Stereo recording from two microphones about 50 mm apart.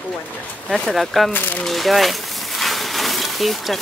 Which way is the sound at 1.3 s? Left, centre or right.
Left.